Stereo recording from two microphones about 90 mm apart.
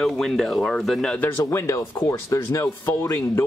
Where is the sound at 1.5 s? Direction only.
30° left (ahead or behind).